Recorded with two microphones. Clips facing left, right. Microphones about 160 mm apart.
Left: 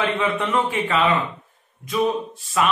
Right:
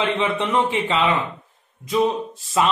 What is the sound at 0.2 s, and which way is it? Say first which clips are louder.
A man's voice: right 1 dB; 25° right (ahead or behind).